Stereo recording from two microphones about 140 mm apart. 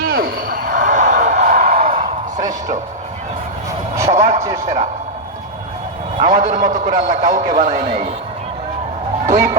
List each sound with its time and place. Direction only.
0.0 s music: 90° right; by 1.7 s 60° right (ahead or behind)
1.8 s a sound: 85° right; by 2.7 s 65° right (ahead or behind)
4.1 s a man's voice: 55° right (ahead or behind)
6.1 s a man's voice: 60° right (ahead or behind)
9.2 s speech: 60° right (ahead or behind)